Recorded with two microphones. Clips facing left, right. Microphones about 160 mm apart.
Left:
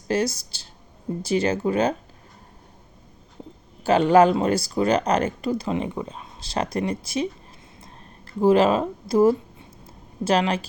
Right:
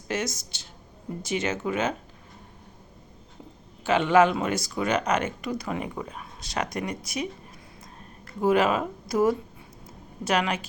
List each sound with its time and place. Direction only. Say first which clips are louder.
0.1 s speech: left 6 dB; 35° left (ahead or behind)
3.8 s speech: left 4 dB; 35° left (ahead or behind)
8.4 s speech: left 5 dB; 30° left (ahead or behind)
9.8 s a sound: left 6 dB; 30° left (ahead or behind)